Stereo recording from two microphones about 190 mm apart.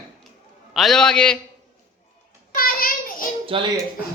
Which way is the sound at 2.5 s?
50° left (ahead or behind).